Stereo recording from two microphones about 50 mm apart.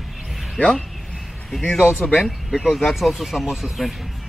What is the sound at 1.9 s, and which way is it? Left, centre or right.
Speech, left.